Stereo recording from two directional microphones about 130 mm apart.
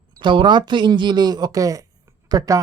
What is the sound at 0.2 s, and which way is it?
Speech, 35° right (ahead or behind).